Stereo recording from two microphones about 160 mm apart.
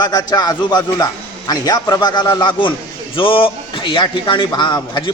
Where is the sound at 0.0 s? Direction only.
25° left (ahead or behind).